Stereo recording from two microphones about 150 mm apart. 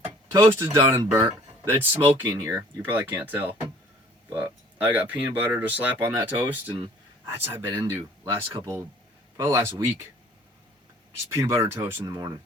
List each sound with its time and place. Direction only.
0.0 s speech: 15° right (ahead or behind)
2.2 s speech: 25° right (ahead or behind)
6.7 s speech: 35° right (ahead or behind)
7.3 s speech: 15° right (ahead or behind)
11.3 s speech: 15° right (ahead or behind)
12.1 s speech: 25° right (ahead or behind)